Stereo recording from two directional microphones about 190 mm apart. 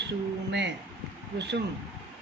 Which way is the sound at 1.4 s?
65° right (ahead or behind).